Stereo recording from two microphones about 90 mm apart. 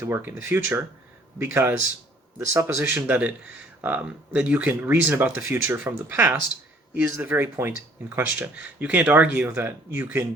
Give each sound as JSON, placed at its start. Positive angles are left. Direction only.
{"t": 0.0, "sound": "a man's voice", "side_deg": -25}
{"t": 3.1, "sound": "speech", "side_deg": -20}